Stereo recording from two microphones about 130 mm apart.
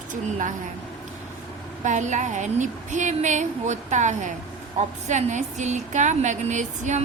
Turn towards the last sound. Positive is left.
turn(degrees=-65)  # may be behind; listen again after turning